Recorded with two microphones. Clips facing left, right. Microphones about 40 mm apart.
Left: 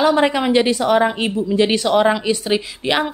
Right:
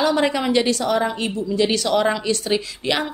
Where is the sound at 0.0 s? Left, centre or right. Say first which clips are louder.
Left 4 dB; left.